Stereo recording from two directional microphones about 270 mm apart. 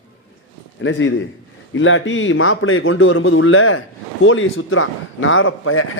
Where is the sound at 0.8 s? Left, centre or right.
Left.